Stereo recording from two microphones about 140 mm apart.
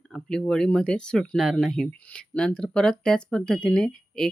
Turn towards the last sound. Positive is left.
turn(degrees=5)  # may be behind; listen again after turning